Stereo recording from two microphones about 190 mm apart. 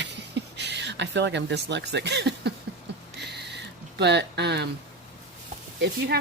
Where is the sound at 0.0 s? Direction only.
65° right (ahead or behind).